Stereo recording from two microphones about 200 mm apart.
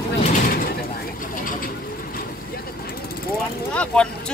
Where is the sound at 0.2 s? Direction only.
40° left (ahead or behind).